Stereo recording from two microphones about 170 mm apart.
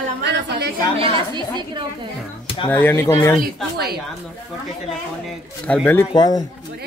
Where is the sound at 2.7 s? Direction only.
10° left (ahead or behind).